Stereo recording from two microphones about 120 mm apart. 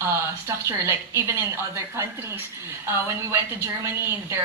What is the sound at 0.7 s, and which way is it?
A woman's voice, 25° right (ahead or behind).